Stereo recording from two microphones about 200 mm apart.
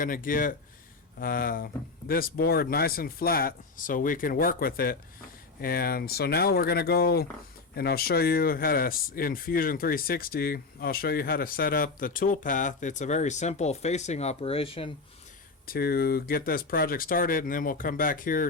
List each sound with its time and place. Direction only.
0.0 s speech: 45° left (ahead or behind); by 14.8 s 30° left (ahead or behind)
15.6 s speech: 50° left (ahead or behind)